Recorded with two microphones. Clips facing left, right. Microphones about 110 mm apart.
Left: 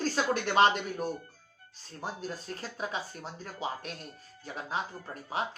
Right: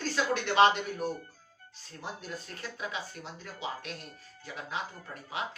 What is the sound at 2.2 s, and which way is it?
Speech, 35° left (ahead or behind).